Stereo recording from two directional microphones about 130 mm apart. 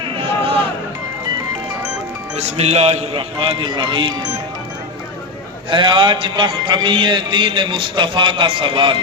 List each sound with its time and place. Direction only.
0.0 s a sound: 40° right (ahead or behind)
2.3 s a man's voice: 55° right (ahead or behind); by 4.4 s 35° right (ahead or behind)
5.7 s speech: 40° right (ahead or behind)